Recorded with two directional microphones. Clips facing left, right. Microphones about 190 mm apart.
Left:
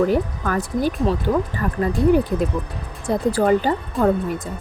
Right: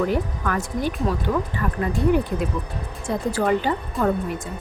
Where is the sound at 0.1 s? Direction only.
40° left (ahead or behind).